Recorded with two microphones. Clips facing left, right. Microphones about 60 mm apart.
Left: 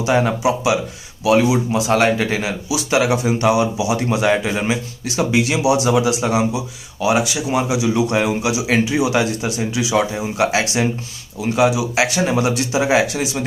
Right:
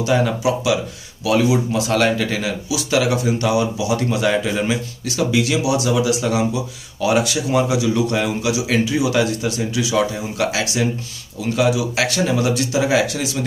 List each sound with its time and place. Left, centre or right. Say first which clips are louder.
0.0 s speech: left 1 dB; left